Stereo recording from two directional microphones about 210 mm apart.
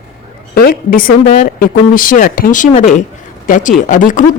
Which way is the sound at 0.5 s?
45° left (ahead or behind).